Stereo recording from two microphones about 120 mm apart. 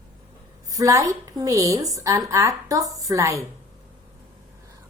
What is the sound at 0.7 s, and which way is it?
Speech, 25° right (ahead or behind).